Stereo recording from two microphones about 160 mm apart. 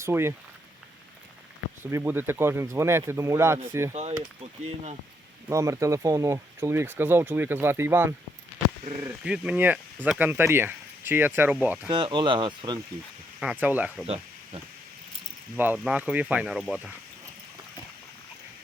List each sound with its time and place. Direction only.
0.0 s speech: 15° right (ahead or behind)
1.8 s speech: 15° right (ahead or behind)
4.2 s speech: 40° right (ahead or behind)
5.5 s speech: 20° right (ahead or behind)
11.9 s speech: 30° right (ahead or behind)
13.4 s speech: 10° right (ahead or behind)
15.5 s speech: 10° right (ahead or behind)